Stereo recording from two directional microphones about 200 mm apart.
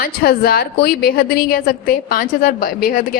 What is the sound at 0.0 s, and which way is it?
A woman's voice, 50° left (ahead or behind).